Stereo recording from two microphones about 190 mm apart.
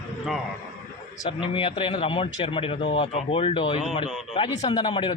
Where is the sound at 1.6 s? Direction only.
25° left (ahead or behind).